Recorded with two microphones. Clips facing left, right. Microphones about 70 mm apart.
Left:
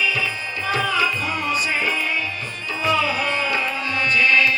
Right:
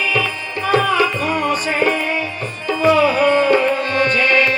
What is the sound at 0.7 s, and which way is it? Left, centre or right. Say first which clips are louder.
Music: right 6 dB; right.